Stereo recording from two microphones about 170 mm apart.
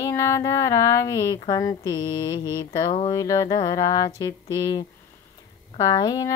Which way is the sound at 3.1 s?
20° left (ahead or behind).